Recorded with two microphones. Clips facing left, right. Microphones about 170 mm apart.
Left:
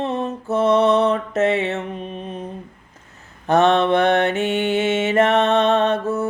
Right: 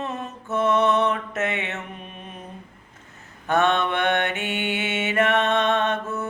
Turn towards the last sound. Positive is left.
turn(degrees=35)  # may be behind; listen again after turning